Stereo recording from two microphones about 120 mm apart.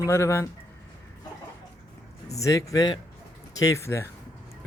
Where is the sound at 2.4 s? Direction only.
30° left (ahead or behind).